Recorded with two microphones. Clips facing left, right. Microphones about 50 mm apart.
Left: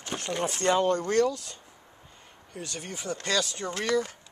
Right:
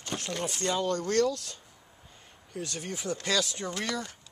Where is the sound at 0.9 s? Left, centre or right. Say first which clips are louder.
Left 2 dB; centre.